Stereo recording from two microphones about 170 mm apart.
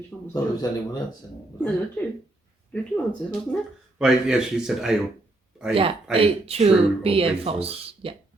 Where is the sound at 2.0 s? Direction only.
10° left (ahead or behind).